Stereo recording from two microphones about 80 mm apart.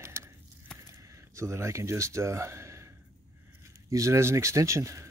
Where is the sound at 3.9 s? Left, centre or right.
Right.